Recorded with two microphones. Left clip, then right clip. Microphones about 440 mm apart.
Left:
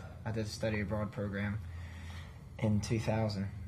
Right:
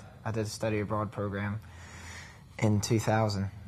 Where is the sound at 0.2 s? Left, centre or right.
Right.